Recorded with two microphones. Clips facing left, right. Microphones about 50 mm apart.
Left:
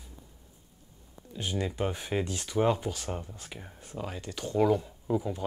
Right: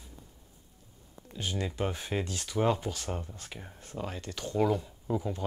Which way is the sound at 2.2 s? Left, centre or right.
Centre.